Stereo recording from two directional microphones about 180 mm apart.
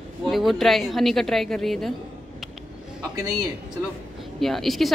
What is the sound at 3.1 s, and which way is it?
Speech, 20° right (ahead or behind).